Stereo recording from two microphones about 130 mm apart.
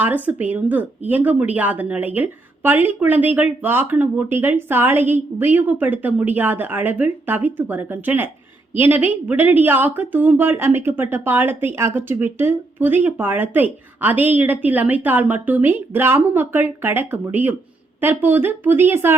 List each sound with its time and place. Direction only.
0.0 s speech: 15° right (ahead or behind)